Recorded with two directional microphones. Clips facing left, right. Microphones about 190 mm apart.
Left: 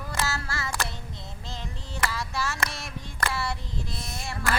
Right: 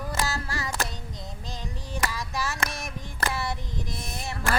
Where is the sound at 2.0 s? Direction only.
15° right (ahead or behind).